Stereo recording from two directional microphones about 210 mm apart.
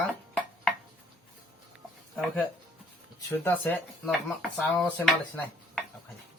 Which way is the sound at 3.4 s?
10° left (ahead or behind).